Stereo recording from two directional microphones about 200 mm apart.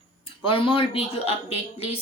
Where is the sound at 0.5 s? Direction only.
25° left (ahead or behind).